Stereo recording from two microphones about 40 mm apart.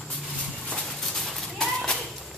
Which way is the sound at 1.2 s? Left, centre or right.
Centre.